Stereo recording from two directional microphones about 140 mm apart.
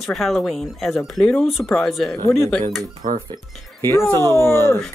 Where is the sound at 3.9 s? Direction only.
15° left (ahead or behind).